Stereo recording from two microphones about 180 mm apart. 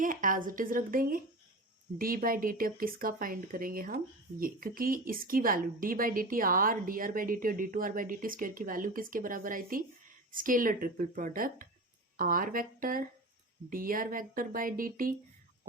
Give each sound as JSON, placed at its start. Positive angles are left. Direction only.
{"t": 0.0, "sound": "speech", "side_deg": -50}